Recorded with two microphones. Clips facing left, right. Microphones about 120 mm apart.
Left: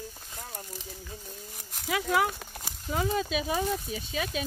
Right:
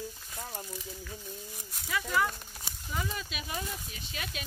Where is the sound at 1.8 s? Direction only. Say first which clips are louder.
Left 4 dB; 90° left.